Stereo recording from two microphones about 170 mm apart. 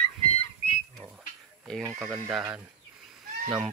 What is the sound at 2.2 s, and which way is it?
Speech, 10° right (ahead or behind).